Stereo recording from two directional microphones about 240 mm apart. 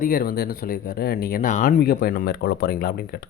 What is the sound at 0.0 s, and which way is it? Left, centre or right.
Speech, left.